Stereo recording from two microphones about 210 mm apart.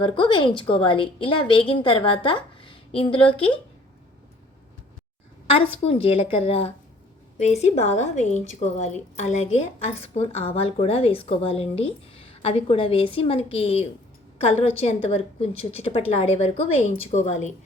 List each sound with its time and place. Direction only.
0.0 s a woman's voice: 25° left (ahead or behind)
5.5 s a woman's voice: 25° left (ahead or behind)